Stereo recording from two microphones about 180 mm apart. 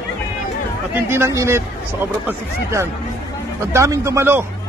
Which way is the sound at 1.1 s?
15° right (ahead or behind).